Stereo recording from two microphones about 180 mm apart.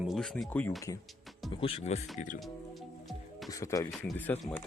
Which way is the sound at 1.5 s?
35° left (ahead or behind).